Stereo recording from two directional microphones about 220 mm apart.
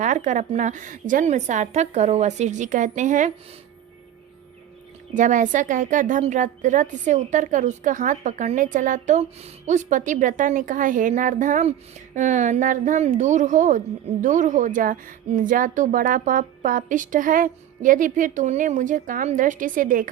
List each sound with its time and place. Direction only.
0.0 s a woman's voice: 35° right (ahead or behind)
5.1 s a woman's voice: 35° right (ahead or behind)